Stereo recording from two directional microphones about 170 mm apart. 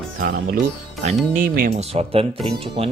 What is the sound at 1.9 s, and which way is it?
Speech, 35° right (ahead or behind).